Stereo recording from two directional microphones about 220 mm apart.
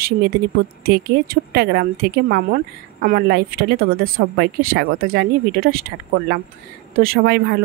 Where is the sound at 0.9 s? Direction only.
45° right (ahead or behind).